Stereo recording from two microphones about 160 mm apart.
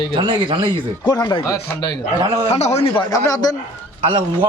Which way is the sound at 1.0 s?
25° left (ahead or behind).